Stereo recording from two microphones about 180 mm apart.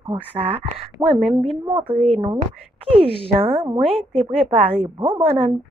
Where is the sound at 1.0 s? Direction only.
20° right (ahead or behind).